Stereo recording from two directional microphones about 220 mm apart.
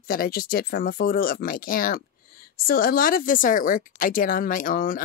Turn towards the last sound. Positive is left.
turn(degrees=40)  # may be behind; listen again after turning